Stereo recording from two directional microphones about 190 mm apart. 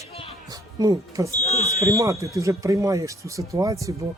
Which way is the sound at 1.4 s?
35° left (ahead or behind).